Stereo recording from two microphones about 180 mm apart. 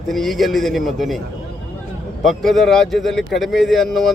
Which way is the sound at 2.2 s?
Centre (ahead or behind).